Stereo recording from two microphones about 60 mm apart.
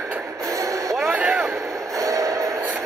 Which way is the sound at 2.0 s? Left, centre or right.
Right.